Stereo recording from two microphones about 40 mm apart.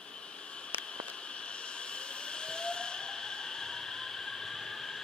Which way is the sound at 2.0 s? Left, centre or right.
Left.